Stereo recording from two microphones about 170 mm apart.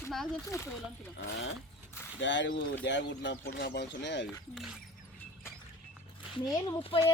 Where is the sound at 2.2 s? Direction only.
90° left.